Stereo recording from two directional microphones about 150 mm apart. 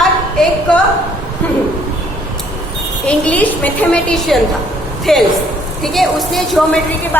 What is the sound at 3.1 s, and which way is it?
A woman's voice, 10° left (ahead or behind).